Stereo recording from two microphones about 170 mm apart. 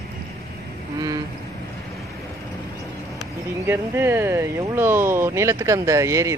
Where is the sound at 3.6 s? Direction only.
15° right (ahead or behind).